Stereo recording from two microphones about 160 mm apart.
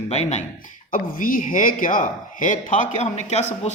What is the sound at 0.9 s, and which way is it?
Speech, 55° left (ahead or behind).